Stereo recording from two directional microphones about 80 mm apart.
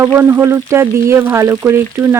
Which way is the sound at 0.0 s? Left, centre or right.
Right.